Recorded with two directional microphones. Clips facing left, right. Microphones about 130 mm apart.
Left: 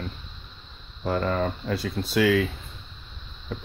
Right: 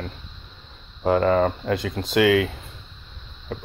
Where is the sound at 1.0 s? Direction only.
70° right (ahead or behind).